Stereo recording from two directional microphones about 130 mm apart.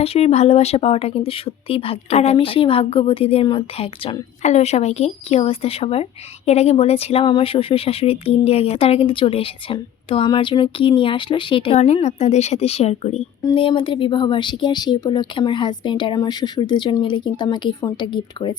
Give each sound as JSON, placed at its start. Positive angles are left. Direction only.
{"t": 0.0, "sound": "speech", "side_deg": 50}
{"t": 4.4, "sound": "speech", "side_deg": 55}
{"t": 11.8, "sound": "a woman's voice", "side_deg": 60}
{"t": 13.4, "sound": "a woman's voice", "side_deg": 40}